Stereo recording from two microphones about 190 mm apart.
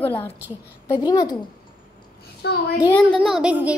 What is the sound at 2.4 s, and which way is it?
Speech, 60° left (ahead or behind).